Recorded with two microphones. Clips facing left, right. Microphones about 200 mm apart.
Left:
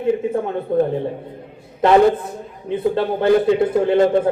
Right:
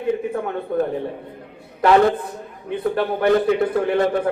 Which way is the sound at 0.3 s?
25° left (ahead or behind).